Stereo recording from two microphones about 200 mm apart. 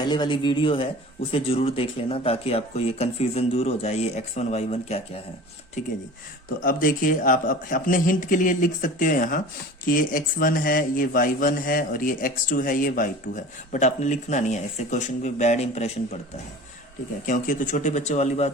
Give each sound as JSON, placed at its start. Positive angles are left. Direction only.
{"t": 0.0, "sound": "speech", "side_deg": 20}
{"t": 6.6, "sound": "speech", "side_deg": 45}
{"t": 17.2, "sound": "speech", "side_deg": 40}